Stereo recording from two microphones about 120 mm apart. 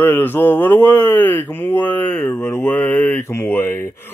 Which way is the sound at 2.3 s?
25° left (ahead or behind).